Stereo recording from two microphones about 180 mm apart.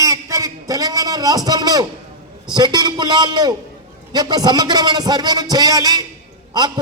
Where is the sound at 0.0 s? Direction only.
20° right (ahead or behind).